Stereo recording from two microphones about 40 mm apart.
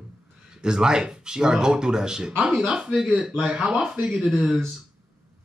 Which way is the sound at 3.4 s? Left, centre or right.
Centre.